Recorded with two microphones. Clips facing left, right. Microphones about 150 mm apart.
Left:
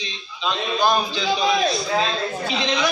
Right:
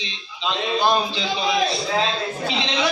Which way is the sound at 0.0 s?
25° right (ahead or behind).